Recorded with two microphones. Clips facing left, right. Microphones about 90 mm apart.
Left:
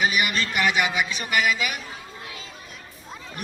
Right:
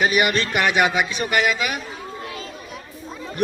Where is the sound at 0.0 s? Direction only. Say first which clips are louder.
Right 4 dB; 45° right (ahead or behind).